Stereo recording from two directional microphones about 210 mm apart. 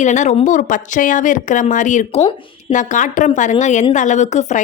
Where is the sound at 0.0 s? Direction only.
35° left (ahead or behind).